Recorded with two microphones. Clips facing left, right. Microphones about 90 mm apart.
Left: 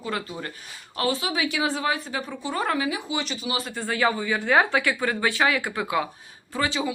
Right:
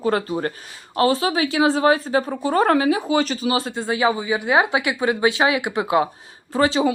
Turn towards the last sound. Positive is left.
turn(degrees=-35)  # may be behind; listen again after turning